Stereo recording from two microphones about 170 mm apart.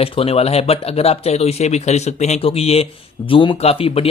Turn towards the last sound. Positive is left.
turn(degrees=35)  # may be behind; listen again after turning